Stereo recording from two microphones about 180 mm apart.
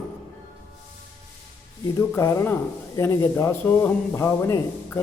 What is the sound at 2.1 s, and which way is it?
A man's voice, 15° left (ahead or behind).